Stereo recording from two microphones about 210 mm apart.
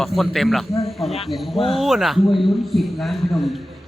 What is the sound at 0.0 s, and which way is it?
A man's voice, centre (ahead or behind).